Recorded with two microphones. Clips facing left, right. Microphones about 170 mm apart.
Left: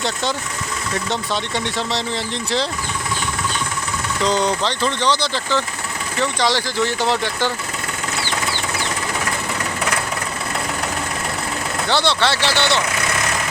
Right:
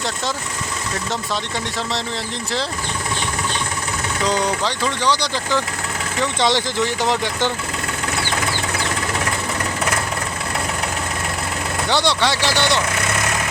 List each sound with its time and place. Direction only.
1.5 s speech: centre (ahead or behind)
4.3 s speech: 10° right (ahead or behind)
11.9 s speech: 15° right (ahead or behind)